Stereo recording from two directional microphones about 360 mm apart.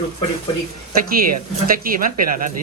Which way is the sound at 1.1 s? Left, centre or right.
Right.